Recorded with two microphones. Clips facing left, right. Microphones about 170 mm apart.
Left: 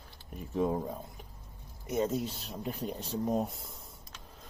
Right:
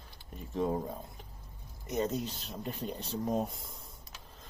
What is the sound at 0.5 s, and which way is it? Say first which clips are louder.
Speech: left 2 dB; 5° left (ahead or behind).